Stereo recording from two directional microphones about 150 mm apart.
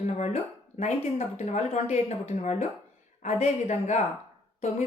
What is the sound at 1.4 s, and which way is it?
Speech, 45° left (ahead or behind).